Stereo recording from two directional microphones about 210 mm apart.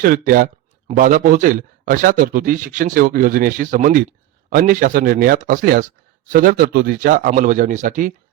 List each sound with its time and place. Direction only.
0.0 s speech: 45° right (ahead or behind)